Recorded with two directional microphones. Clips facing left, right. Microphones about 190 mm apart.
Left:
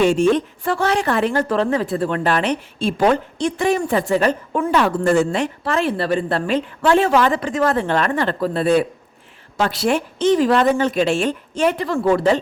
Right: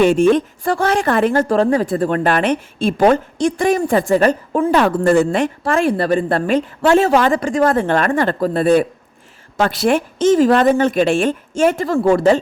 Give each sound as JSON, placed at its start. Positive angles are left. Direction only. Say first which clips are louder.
{"t": 0.0, "sound": "a woman's voice", "louder": "right 3 dB", "side_deg": -55}
{"t": 5.0, "sound": "a woman's voice", "louder": "right 3 dB", "side_deg": -55}